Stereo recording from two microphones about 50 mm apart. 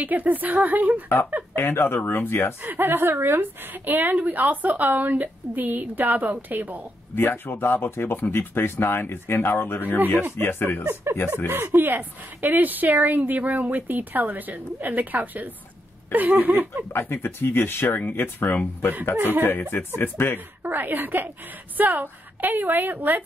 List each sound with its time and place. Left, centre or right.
0.0 s a woman's voice: right
1.5 s speech: left
2.6 s a woman's voice: right
7.2 s speech: left
11.4 s a woman's voice: right
16.9 s speech: left
19.1 s a woman's voice: right
19.4 s speech: left
20.6 s a woman's voice: right